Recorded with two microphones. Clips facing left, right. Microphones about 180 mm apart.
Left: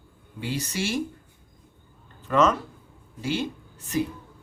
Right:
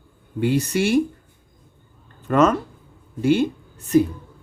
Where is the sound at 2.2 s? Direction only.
55° right (ahead or behind).